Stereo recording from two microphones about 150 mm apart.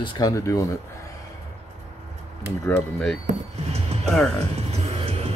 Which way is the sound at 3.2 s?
45° right (ahead or behind).